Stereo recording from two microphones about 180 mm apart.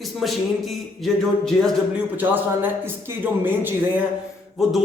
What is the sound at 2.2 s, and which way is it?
Speech, 10° right (ahead or behind).